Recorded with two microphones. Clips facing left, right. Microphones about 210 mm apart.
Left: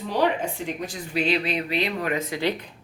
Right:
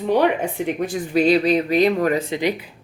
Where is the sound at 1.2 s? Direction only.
40° right (ahead or behind).